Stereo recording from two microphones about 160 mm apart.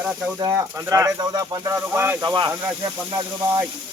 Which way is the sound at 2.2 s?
25° right (ahead or behind).